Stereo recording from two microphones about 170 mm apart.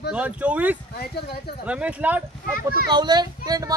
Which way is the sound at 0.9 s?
70° left (ahead or behind).